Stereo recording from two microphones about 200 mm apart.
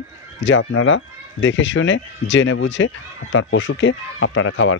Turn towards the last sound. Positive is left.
turn(degrees=80)